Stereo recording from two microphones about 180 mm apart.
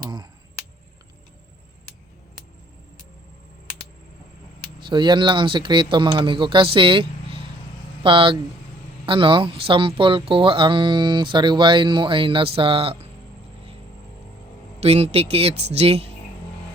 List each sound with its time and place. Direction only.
0.0 s a sound: 25° right (ahead or behind)
4.8 s speech: 25° right (ahead or behind)
14.8 s speech: 35° right (ahead or behind)